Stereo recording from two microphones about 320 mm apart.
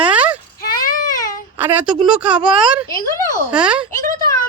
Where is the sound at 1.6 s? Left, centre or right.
Centre.